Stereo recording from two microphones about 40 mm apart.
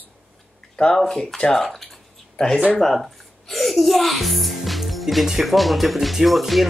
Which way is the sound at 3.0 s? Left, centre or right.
Centre.